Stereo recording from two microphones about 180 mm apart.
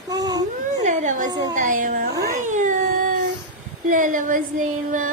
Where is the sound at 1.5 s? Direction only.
45° right (ahead or behind).